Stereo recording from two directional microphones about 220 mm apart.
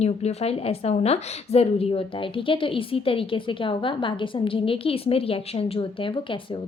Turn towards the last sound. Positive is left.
turn(degrees=25)  # may be behind; listen again after turning